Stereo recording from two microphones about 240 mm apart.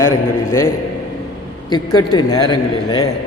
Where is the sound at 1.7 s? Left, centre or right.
Centre.